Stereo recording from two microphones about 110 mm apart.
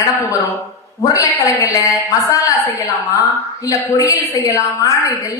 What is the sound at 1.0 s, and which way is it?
A woman's voice, 30° left (ahead or behind).